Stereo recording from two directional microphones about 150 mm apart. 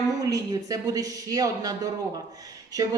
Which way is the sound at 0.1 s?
25° right (ahead or behind).